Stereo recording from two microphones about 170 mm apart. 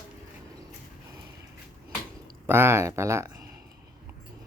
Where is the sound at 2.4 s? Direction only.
15° right (ahead or behind).